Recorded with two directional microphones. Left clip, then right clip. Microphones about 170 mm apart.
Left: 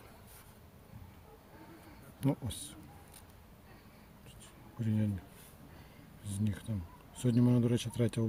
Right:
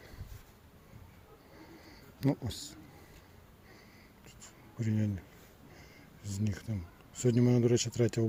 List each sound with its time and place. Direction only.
2.2 s speech: 25° right (ahead or behind)
4.8 s speech: 20° right (ahead or behind)
6.2 s speech: 20° right (ahead or behind)